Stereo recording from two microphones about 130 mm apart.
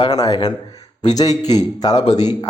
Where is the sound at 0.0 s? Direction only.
30° left (ahead or behind).